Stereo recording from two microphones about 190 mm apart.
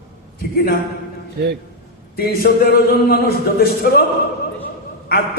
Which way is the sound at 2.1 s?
55° left (ahead or behind).